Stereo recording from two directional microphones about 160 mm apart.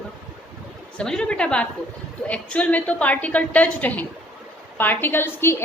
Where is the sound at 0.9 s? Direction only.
5° left (ahead or behind).